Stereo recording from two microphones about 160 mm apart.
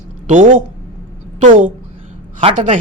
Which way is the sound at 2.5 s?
55° right (ahead or behind).